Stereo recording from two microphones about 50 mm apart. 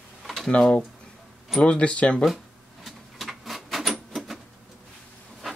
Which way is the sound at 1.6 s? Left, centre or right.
Left.